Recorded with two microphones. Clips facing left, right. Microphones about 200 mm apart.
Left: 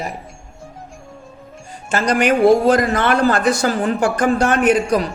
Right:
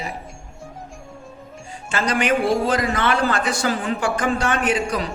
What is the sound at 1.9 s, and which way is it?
A man's voice, 45° left (ahead or behind).